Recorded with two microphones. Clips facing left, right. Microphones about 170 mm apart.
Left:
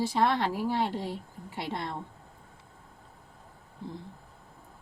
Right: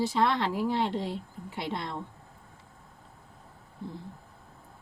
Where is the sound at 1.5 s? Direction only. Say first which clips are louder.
Even; 50° left (ahead or behind).